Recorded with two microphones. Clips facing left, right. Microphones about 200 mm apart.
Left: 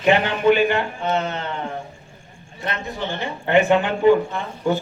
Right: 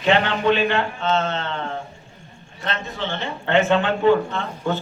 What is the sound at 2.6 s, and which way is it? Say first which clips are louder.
A man's voice: left 1 dB; 15° left (ahead or behind).